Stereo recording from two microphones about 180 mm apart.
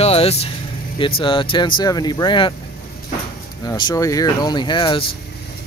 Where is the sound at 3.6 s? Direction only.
20° left (ahead or behind).